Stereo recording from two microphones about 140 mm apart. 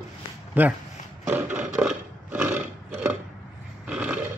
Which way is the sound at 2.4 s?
15° right (ahead or behind).